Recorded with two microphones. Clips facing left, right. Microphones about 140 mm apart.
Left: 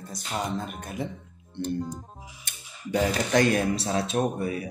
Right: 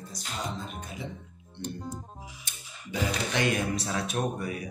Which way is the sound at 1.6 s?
50° left (ahead or behind).